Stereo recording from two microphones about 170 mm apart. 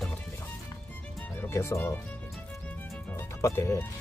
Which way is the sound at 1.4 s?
15° left (ahead or behind).